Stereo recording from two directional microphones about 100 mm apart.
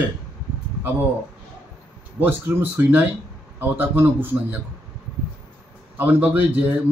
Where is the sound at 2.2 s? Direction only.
20° right (ahead or behind).